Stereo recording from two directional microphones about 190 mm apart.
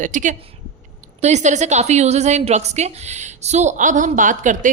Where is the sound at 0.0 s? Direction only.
40° right (ahead or behind).